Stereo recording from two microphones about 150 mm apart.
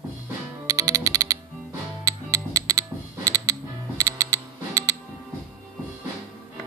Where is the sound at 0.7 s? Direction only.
20° right (ahead or behind).